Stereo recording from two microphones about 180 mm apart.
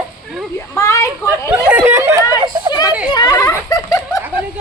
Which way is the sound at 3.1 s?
20° left (ahead or behind).